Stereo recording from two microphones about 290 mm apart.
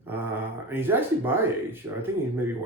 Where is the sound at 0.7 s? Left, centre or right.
Centre.